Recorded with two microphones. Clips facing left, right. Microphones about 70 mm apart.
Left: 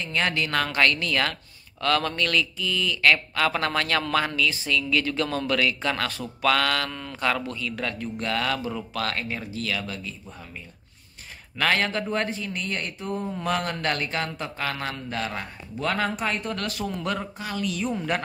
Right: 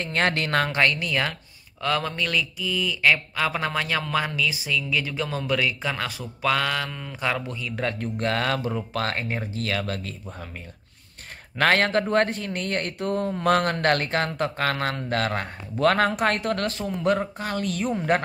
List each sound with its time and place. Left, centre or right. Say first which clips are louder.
0.0 s speech: right 2 dB; right
7.7 s speech: right 3 dB; right
11.5 s speech: right 4 dB; right
16.5 s speech: right 2 dB; right